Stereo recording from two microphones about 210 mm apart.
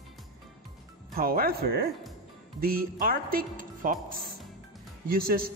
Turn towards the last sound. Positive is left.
turn(degrees=-45)  # may be behind; listen again after turning